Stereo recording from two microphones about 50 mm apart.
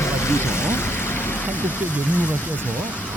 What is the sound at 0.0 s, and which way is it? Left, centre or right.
Vehicle, left.